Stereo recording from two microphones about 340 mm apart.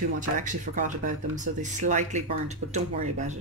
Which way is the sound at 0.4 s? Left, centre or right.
Right.